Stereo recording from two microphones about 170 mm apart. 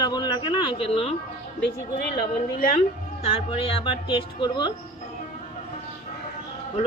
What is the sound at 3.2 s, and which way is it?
Speech, 30° left (ahead or behind).